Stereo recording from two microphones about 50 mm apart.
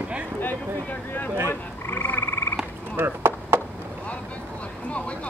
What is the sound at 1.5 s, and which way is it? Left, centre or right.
Frog, left.